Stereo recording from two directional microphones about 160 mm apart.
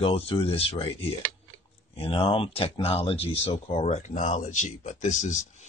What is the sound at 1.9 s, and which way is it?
Speech, 35° left (ahead or behind).